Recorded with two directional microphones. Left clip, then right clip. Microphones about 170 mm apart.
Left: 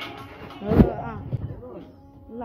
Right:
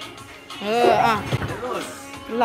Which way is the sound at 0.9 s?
30° right (ahead or behind).